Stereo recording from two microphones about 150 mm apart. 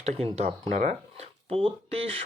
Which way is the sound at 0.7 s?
55° right (ahead or behind).